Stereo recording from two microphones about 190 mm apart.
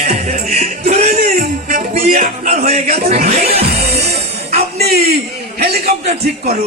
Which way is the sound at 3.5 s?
35° right (ahead or behind).